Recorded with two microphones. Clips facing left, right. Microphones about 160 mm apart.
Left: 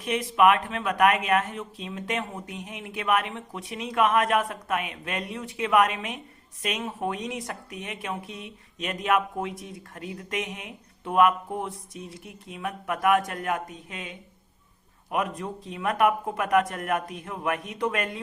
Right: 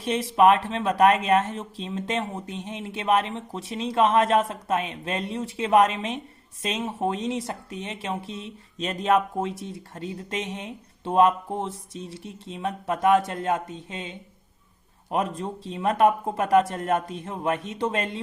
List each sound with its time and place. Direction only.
0.0 s speech: 30° right (ahead or behind)